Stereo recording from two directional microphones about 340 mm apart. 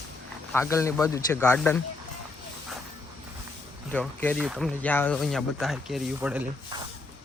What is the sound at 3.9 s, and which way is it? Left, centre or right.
Speech, centre.